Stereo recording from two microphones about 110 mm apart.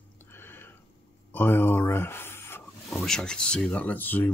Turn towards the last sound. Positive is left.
turn(degrees=15)  # may be behind; listen again after turning